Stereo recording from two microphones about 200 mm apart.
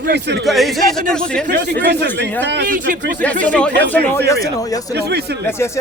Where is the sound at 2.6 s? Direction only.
40° right (ahead or behind).